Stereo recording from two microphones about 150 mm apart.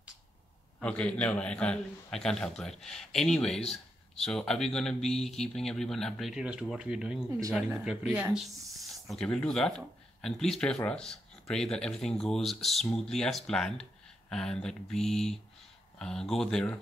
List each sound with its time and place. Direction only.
0.7 s speech: 10° left (ahead or behind)
7.2 s speech: 20° right (ahead or behind)
7.5 s speech: 5° right (ahead or behind)